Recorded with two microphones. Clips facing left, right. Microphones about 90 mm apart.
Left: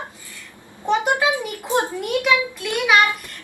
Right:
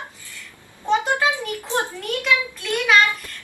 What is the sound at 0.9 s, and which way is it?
A child's voice, 10° left (ahead or behind).